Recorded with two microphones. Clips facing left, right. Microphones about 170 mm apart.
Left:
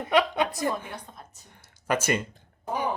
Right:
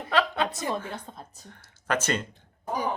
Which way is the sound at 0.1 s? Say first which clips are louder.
Left 3 dB; 15° left (ahead or behind).